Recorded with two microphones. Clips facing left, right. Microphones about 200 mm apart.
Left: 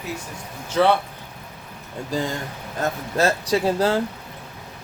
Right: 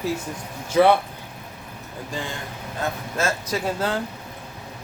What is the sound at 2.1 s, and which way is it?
Speech, 40° left (ahead or behind).